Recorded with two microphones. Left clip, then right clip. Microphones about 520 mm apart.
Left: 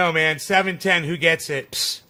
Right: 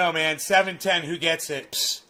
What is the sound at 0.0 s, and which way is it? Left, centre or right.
Speech, left.